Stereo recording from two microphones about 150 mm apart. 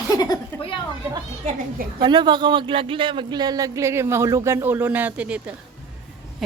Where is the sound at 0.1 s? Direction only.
25° left (ahead or behind).